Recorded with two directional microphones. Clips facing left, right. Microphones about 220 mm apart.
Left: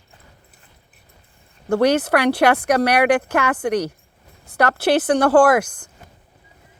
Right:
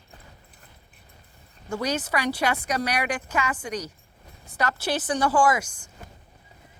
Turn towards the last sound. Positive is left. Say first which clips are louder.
# left 7 dB
turn(degrees=60)  # may be behind; listen again after turning